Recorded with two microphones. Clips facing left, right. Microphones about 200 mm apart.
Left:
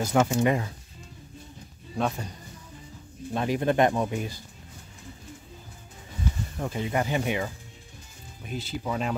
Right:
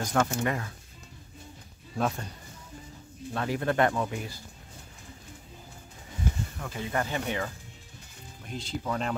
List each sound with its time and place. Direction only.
0.0 s speech: 10° left (ahead or behind)
2.0 s speech: centre (ahead or behind)
3.3 s speech: 20° left (ahead or behind)
6.6 s speech: 20° left (ahead or behind); by 9.1 s 5° left (ahead or behind)